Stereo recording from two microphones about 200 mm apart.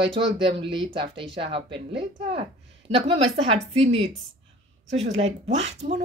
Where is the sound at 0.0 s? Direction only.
25° right (ahead or behind).